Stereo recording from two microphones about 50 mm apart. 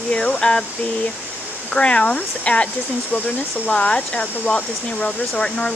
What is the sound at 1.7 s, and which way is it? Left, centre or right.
Speech, left.